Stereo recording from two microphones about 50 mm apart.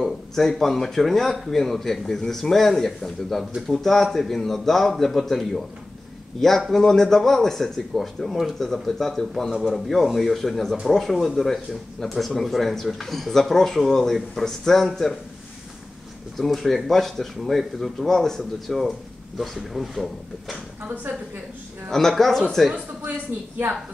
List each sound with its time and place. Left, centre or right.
0.0 s speech: centre
6.7 s speech: centre
16.3 s speech: centre
20.8 s a woman's voice: right
21.9 s speech: centre